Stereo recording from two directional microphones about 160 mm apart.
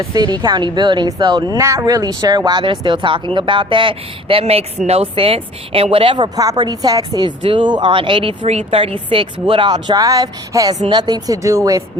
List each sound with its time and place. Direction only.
0.0 s speech: 25° right (ahead or behind)